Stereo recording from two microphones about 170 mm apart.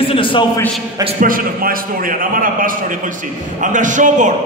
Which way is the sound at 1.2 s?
55° right (ahead or behind).